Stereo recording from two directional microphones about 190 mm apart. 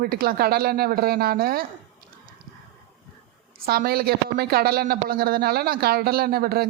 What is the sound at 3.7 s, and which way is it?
A woman's voice, 55° right (ahead or behind).